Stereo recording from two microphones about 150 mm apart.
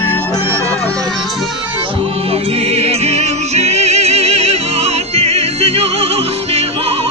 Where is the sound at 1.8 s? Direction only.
35° right (ahead or behind).